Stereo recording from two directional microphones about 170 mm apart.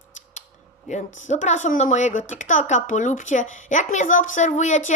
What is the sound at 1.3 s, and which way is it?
A woman's voice, 45° left (ahead or behind).